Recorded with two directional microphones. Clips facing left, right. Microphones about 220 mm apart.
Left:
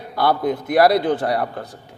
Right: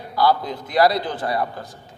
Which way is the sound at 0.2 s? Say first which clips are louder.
Left 1 dB; 55° left (ahead or behind).